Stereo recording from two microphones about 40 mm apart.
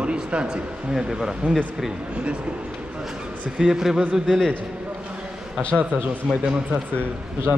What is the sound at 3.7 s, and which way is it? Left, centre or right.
Speech, centre.